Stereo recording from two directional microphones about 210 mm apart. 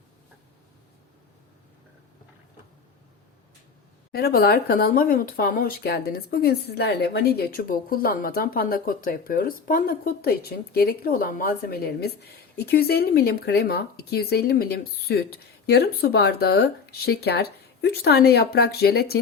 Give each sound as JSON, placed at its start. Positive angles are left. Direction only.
{"t": 4.1, "sound": "speech", "side_deg": 45}